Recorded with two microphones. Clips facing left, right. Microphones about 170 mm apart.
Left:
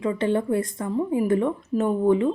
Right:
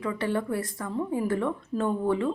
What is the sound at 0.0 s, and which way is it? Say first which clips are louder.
Speech: left 5 dB; 20° left (ahead or behind).